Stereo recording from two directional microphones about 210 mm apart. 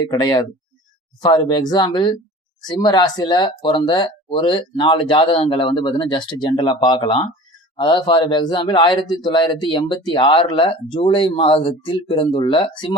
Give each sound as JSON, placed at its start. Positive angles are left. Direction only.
{"t": 0.0, "sound": "speech", "side_deg": 20}